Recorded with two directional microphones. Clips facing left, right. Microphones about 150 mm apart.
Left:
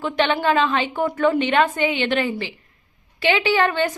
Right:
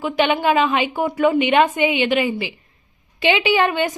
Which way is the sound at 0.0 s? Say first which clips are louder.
Right 2 dB; 10° right (ahead or behind).